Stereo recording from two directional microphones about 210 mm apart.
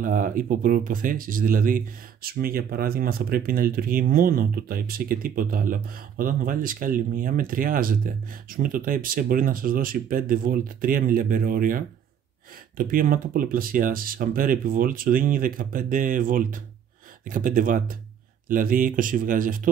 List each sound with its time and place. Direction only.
0.0 s speech: 40° right (ahead or behind)